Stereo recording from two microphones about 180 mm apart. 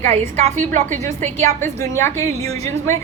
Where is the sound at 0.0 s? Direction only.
35° right (ahead or behind).